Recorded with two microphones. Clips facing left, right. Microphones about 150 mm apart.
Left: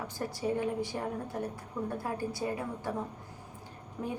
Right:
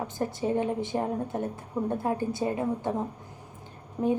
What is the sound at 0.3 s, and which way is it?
A woman's voice, 25° right (ahead or behind).